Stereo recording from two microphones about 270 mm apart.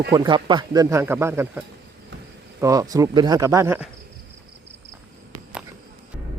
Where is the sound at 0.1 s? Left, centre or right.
Centre.